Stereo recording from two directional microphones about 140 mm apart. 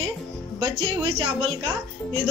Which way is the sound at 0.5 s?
40° right (ahead or behind).